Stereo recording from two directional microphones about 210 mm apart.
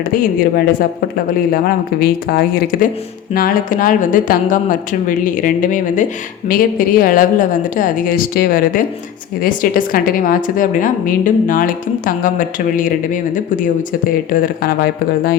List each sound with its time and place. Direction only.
0.1 s a woman's voice: 45° left (ahead or behind)
14.3 s speech: 40° left (ahead or behind)